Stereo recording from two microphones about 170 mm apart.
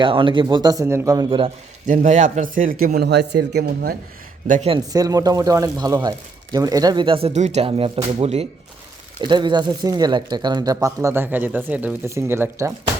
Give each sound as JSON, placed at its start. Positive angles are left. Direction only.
{"t": 0.0, "sound": "speech", "side_deg": -30}
{"t": 1.9, "sound": "a man's voice", "side_deg": -50}
{"t": 4.4, "sound": "speech", "side_deg": -50}
{"t": 4.7, "sound": "speech", "side_deg": -20}
{"t": 9.2, "sound": "speech", "side_deg": -25}